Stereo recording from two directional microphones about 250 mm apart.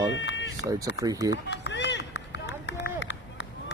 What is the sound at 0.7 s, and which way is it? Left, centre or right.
Speech, centre.